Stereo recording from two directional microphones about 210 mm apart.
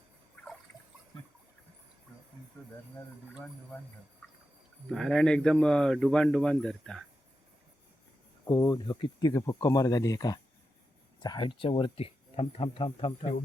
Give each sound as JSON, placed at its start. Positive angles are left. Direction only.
{"t": 4.9, "sound": "speech", "side_deg": 0}
{"t": 8.4, "sound": "speech", "side_deg": 15}